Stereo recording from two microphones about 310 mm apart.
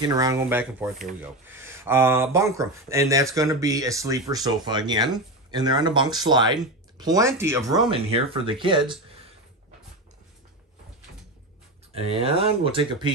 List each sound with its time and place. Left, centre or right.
0.0 s speech: centre
11.9 s speech: centre